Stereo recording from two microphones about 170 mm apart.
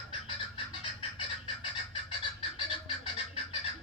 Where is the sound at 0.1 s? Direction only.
35° left (ahead or behind).